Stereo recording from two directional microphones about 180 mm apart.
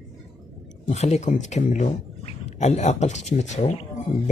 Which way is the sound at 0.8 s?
40° left (ahead or behind).